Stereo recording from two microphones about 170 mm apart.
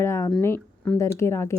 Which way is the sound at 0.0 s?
15° left (ahead or behind).